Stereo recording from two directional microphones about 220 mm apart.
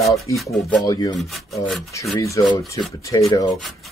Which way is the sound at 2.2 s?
15° left (ahead or behind).